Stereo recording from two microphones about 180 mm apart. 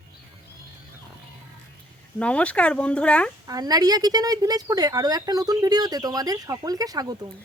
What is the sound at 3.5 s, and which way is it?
A woman's voice, 20° right (ahead or behind).